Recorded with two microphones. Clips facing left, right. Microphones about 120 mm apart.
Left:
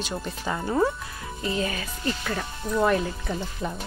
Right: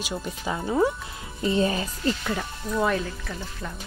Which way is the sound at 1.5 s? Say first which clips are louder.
Right 6 dB; 30° right (ahead or behind).